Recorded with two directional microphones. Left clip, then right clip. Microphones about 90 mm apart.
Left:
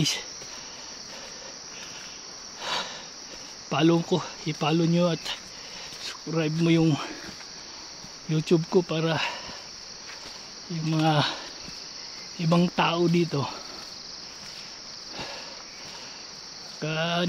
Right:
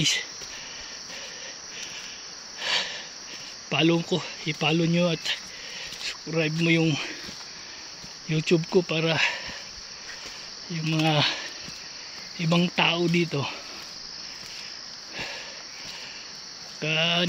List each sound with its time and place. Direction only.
2.6 s cricket: 30° left (ahead or behind)
3.7 s speech: 35° left (ahead or behind)
8.3 s speech: 25° left (ahead or behind)
10.8 s speech: 30° left (ahead or behind)
16.8 s speech: 20° left (ahead or behind)